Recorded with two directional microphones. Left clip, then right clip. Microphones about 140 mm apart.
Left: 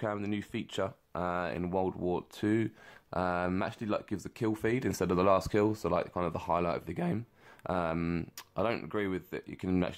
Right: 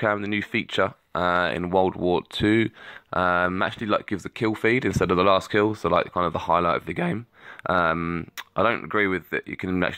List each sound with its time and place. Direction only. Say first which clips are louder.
0.0 s speech: right 11 dB; 30° right (ahead or behind)
8.0 s speech: right 7 dB; 5° right (ahead or behind)
8.4 s speech: right 11 dB; 25° right (ahead or behind)
9.5 s speech: right 6 dB; 15° right (ahead or behind)